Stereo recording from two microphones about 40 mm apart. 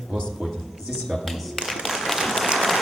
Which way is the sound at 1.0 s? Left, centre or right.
Centre.